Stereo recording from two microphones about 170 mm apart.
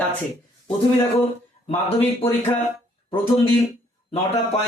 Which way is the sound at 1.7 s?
35° left (ahead or behind).